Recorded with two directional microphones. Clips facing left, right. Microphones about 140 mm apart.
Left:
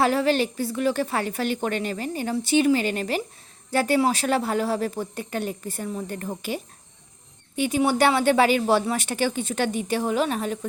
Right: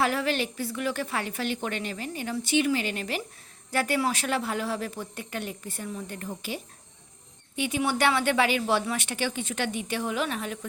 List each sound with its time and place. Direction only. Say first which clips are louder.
0.0 s a woman's voice: left 6 dB; 30° left (ahead or behind)